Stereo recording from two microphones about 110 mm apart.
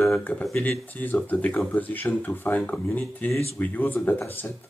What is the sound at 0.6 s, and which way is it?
Speech, 15° left (ahead or behind).